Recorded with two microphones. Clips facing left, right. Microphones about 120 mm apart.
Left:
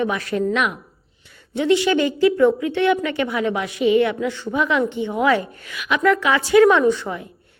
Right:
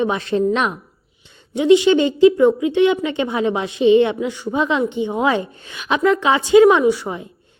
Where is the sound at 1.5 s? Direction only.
15° right (ahead or behind).